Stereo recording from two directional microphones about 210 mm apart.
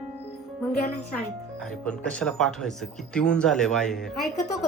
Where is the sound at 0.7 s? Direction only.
45° left (ahead or behind).